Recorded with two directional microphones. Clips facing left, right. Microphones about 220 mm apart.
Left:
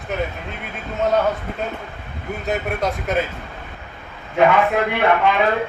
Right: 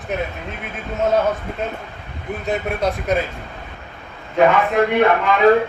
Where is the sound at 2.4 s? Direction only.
Centre (ahead or behind).